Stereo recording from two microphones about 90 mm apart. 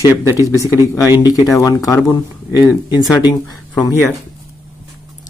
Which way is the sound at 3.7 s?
35° left (ahead or behind).